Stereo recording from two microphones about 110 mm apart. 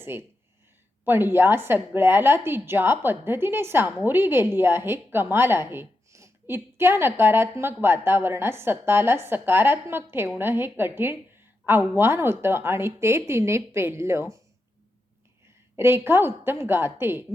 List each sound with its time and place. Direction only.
0.0 s a woman's voice: 20° right (ahead or behind)
15.7 s a woman's voice: 20° right (ahead or behind)